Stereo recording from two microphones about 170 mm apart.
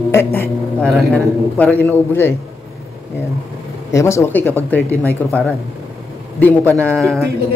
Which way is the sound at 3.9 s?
15° left (ahead or behind).